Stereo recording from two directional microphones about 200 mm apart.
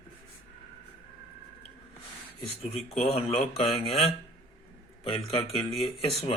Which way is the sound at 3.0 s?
30° left (ahead or behind).